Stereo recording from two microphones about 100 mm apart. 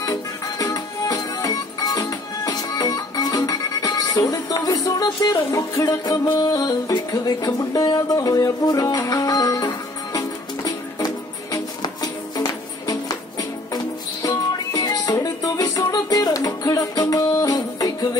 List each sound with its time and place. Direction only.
0.0 s music: 35° left (ahead or behind)
5.9 s music: 45° left (ahead or behind)
17.6 s music: 45° left (ahead or behind)